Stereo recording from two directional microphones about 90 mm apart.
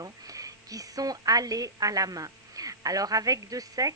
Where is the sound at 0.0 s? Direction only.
40° right (ahead or behind).